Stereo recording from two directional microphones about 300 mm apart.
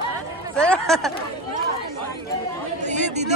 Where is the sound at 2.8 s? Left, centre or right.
Right.